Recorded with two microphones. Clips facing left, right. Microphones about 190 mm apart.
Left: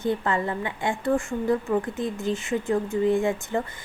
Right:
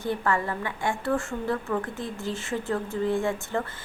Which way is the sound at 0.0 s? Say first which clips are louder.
Left 2 dB; 20° left (ahead or behind).